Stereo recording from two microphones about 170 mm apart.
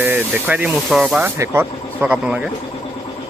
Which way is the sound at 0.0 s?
10° right (ahead or behind).